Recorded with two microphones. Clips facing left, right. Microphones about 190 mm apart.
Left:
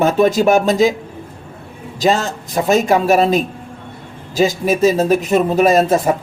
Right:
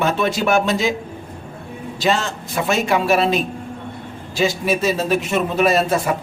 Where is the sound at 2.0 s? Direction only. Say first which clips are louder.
Left 4 dB; 40° left (ahead or behind).